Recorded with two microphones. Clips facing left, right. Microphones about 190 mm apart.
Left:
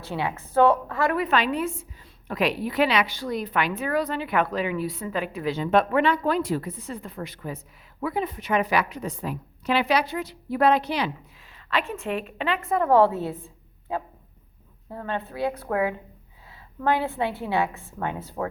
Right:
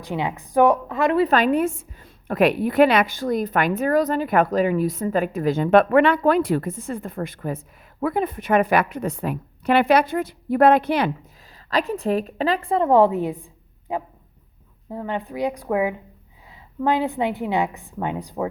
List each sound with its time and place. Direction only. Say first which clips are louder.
0.0 s a woman's voice: right 3 dB; 15° right (ahead or behind)
1.2 s a woman's voice: right 6 dB; 45° right (ahead or behind)
11.7 s a woman's voice: right 6 dB; 40° right (ahead or behind); by 18.4 s 15° right (ahead or behind)